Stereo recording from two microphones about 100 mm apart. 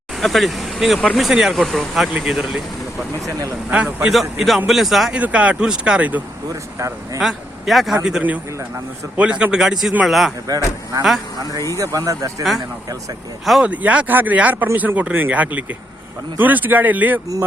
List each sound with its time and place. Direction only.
0.2 s speech: centre (ahead or behind)
3.7 s speech: 15° right (ahead or behind)
4.1 s speech: centre (ahead or behind)
5.2 s speech: 15° right (ahead or behind)
6.5 s speech: 30° right (ahead or behind)
7.2 s speech: centre (ahead or behind)
11.8 s speech: 35° right (ahead or behind)
12.4 s speech: centre (ahead or behind)
13.7 s speech: 15° right (ahead or behind)